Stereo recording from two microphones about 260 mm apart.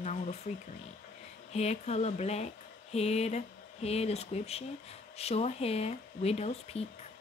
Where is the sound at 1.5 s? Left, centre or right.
Left.